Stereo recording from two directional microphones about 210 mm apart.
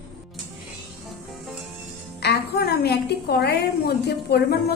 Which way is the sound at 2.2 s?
50° left (ahead or behind).